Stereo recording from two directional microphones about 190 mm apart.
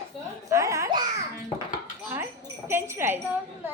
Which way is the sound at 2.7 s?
10° right (ahead or behind).